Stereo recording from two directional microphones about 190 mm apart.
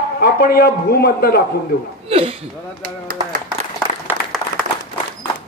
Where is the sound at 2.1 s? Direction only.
30° right (ahead or behind).